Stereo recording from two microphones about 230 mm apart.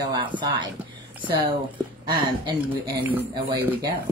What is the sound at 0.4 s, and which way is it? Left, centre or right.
Speech, centre.